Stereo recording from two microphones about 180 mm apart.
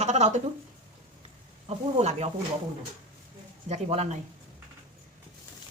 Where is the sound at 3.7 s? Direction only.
35° right (ahead or behind).